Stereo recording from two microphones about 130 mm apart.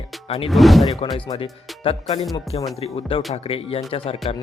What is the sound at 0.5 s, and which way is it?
Speech, centre (ahead or behind).